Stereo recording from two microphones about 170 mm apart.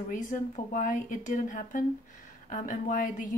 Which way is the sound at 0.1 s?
50° left (ahead or behind).